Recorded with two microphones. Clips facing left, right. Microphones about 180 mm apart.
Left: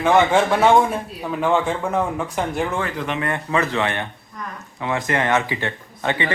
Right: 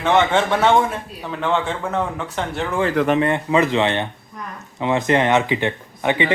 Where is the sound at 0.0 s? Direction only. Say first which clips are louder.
Left 1 dB; 10° left (ahead or behind).